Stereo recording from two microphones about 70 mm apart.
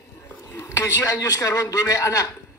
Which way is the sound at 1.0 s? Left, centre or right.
Left.